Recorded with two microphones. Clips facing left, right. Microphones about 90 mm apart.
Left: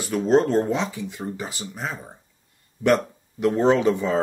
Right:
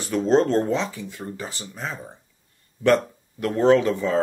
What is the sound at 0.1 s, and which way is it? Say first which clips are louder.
Speech: even; 5° left (ahead or behind).